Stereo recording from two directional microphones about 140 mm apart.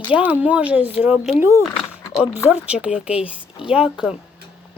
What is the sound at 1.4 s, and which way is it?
Speech, 20° right (ahead or behind).